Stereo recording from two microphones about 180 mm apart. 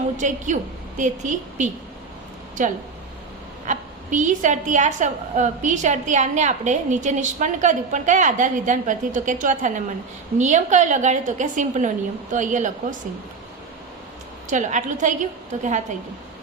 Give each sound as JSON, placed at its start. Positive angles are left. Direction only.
{"t": 0.2, "sound": "a woman's voice", "side_deg": -45}
{"t": 14.5, "sound": "a woman's voice", "side_deg": -40}